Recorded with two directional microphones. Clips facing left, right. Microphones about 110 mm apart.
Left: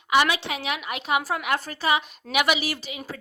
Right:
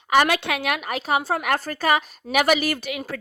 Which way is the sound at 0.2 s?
50° right (ahead or behind).